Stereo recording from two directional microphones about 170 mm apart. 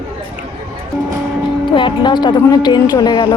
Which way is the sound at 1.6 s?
30° left (ahead or behind).